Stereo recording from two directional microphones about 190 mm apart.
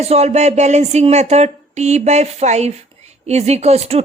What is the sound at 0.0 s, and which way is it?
Speech, 35° right (ahead or behind).